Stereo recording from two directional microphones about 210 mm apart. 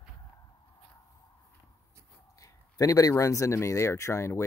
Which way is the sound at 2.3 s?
15° left (ahead or behind).